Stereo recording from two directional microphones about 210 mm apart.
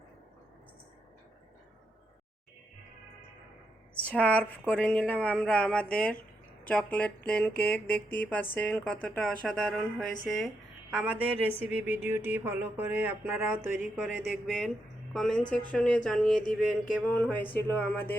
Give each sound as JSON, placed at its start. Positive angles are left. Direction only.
{"t": 4.0, "sound": "music", "side_deg": 5}
{"t": 4.7, "sound": "speech", "side_deg": 5}
{"t": 6.7, "sound": "music", "side_deg": 5}
{"t": 8.5, "sound": "speech", "side_deg": 5}
{"t": 10.9, "sound": "music", "side_deg": -5}
{"t": 13.9, "sound": "speech", "side_deg": -5}
{"t": 16.9, "sound": "music", "side_deg": 5}